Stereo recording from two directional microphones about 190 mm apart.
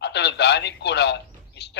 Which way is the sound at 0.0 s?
65° left (ahead or behind).